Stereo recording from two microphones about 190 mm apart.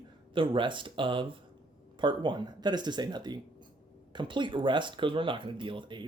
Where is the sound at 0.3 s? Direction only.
25° right (ahead or behind).